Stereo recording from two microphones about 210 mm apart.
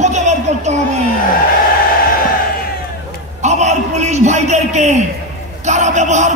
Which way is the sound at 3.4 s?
35° right (ahead or behind).